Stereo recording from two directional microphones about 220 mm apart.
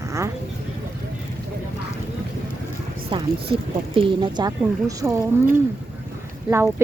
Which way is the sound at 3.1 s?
20° right (ahead or behind).